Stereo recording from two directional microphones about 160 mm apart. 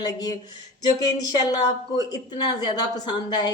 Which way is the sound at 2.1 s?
25° left (ahead or behind).